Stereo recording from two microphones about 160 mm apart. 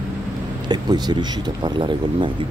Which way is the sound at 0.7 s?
25° right (ahead or behind).